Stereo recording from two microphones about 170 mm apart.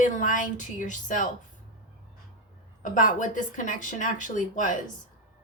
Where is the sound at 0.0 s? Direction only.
50° left (ahead or behind).